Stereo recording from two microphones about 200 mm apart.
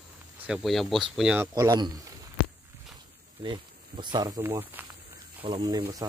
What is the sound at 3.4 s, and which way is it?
Speech, 25° right (ahead or behind).